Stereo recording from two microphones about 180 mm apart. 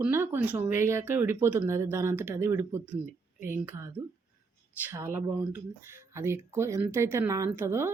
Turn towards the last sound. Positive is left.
turn(degrees=-15)  # may be behind; listen again after turning